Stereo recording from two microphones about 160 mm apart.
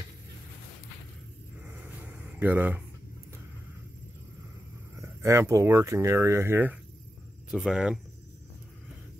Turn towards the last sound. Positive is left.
turn(degrees=-5)  # may be behind; listen again after turning